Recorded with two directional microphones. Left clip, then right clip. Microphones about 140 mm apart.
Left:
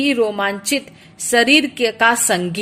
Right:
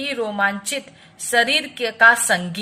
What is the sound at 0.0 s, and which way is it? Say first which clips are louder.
Speech: left 4 dB; 40° left (ahead or behind).